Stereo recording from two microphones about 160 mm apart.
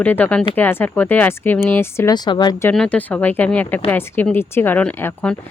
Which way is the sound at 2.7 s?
5° left (ahead or behind).